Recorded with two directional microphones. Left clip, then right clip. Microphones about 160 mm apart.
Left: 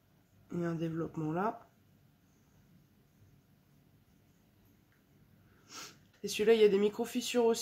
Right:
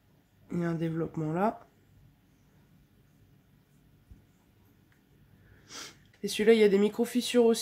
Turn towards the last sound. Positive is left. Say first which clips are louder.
# right 5 dB
turn(degrees=-55)  # may be behind; listen again after turning